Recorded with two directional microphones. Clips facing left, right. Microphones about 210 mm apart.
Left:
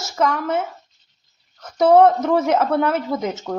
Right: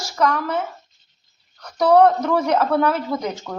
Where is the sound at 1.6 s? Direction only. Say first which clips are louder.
Left 1 dB; 20° left (ahead or behind).